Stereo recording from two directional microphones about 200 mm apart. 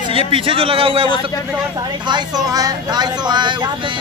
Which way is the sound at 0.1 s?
25° right (ahead or behind).